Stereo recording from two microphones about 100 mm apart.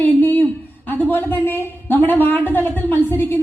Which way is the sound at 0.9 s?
20° left (ahead or behind).